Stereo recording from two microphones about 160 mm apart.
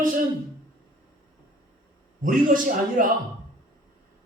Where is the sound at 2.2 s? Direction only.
60° right (ahead or behind).